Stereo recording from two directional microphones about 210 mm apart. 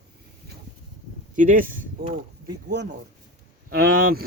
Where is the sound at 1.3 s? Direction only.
40° right (ahead or behind).